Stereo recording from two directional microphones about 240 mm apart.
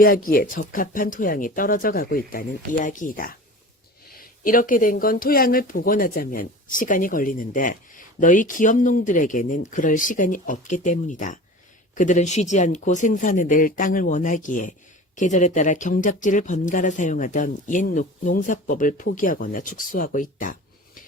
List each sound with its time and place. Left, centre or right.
0.0 s speech: left